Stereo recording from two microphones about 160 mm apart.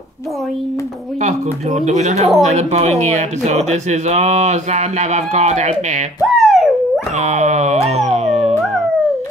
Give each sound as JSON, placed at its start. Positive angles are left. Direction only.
{"t": 1.2, "sound": "speech", "side_deg": -45}
{"t": 6.2, "sound": "a sound", "side_deg": 0}
{"t": 7.2, "sound": "dog", "side_deg": -45}